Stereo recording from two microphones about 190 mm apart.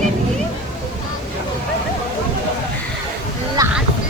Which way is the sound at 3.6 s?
20° right (ahead or behind).